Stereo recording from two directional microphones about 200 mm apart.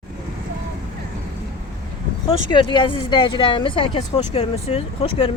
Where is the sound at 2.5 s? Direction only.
25° left (ahead or behind).